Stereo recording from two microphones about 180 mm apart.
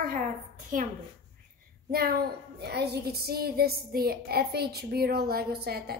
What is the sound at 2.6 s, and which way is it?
A woman's voice, 65° right (ahead or behind).